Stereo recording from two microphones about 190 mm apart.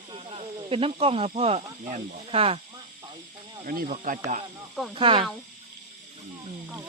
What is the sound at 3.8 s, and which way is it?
Speech, 40° right (ahead or behind).